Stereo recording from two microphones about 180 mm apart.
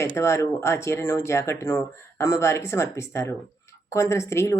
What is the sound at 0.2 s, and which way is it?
Speech, 15° left (ahead or behind).